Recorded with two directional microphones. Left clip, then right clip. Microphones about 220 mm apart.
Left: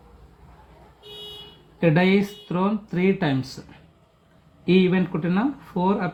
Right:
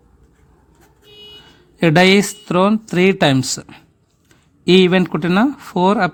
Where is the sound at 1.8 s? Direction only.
55° right (ahead or behind).